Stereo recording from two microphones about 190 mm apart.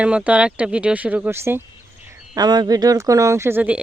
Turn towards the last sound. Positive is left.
turn(degrees=-10)  # may be behind; listen again after turning